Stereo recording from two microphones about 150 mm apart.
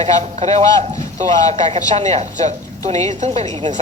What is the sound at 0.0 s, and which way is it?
Speech, 45° right (ahead or behind).